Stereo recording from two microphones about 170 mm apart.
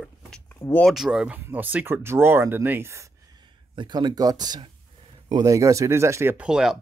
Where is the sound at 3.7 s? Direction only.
25° right (ahead or behind).